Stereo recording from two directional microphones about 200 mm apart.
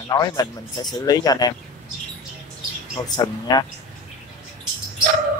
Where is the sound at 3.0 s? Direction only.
20° left (ahead or behind).